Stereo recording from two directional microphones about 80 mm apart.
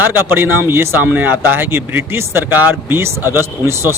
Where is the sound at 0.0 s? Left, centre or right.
Right.